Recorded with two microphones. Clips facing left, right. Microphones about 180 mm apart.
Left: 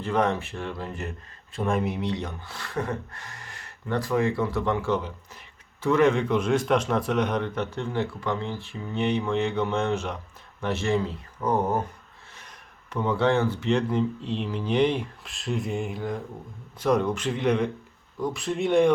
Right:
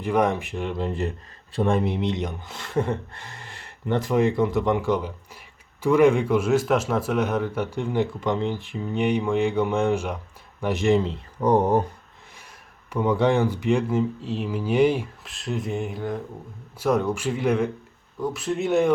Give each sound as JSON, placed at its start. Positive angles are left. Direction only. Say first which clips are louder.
{"t": 0.0, "sound": "speech", "louder": "right 3 dB", "side_deg": -15}
{"t": 11.3, "sound": "speech", "louder": "right 5 dB", "side_deg": -35}
{"t": 12.4, "sound": "speech", "louder": "even", "side_deg": -10}